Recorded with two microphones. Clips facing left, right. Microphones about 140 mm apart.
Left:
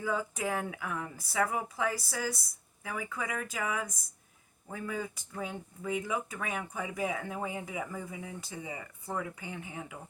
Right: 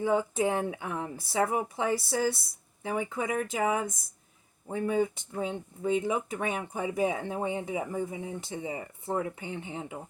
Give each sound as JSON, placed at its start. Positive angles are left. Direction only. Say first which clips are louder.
{"t": 0.0, "sound": "speech", "louder": "right 7 dB", "side_deg": -25}